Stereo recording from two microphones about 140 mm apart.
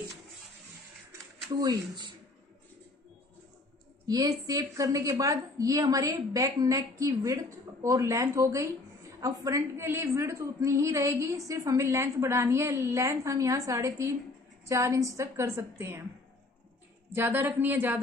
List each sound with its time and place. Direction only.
1.5 s a woman's voice: 30° right (ahead or behind)
4.1 s a woman's voice: 25° right (ahead or behind)
17.1 s a woman's voice: 15° right (ahead or behind)